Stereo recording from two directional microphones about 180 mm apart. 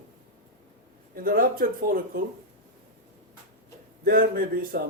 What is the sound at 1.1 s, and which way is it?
Speech, 55° right (ahead or behind).